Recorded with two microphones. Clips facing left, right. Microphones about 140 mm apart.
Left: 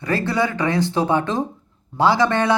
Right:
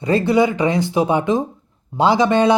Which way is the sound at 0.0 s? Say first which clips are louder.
Right 6 dB; 20° right (ahead or behind).